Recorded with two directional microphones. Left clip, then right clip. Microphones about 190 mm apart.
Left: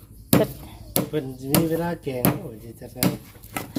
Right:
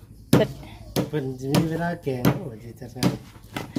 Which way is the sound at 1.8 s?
35° right (ahead or behind).